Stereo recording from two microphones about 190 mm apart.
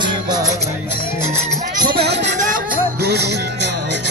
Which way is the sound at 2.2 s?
40° right (ahead or behind).